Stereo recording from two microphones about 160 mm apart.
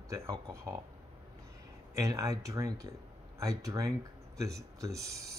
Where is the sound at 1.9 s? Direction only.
20° right (ahead or behind).